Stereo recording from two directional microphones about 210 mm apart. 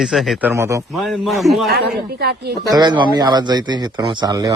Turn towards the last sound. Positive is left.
turn(degrees=-20)  # may be behind; listen again after turning